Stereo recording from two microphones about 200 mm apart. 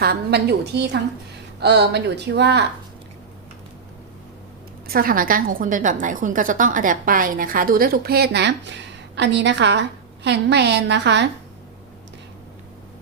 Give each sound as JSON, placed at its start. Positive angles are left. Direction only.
{"t": 0.0, "sound": "speech", "side_deg": -55}
{"t": 4.9, "sound": "a woman's voice", "side_deg": -45}